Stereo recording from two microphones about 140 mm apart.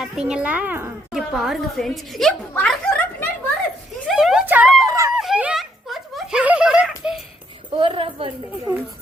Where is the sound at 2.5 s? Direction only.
10° left (ahead or behind).